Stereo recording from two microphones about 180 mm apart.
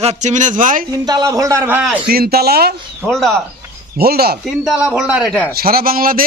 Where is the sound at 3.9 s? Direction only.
60° right (ahead or behind).